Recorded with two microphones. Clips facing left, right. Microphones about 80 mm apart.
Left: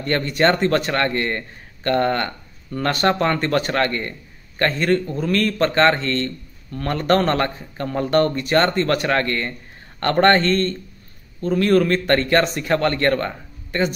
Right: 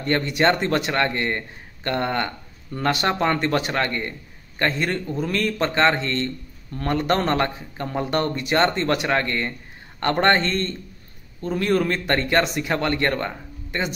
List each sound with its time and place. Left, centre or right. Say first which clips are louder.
0.0 s a man's voice: left 2 dB; centre